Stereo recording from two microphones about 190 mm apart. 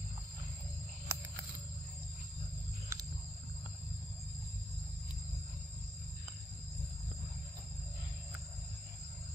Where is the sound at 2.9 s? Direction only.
15° right (ahead or behind).